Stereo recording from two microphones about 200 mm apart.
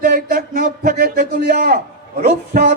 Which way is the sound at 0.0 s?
45° right (ahead or behind).